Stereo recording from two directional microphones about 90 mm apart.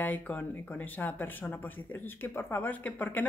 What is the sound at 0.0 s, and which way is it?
Speech, 20° left (ahead or behind).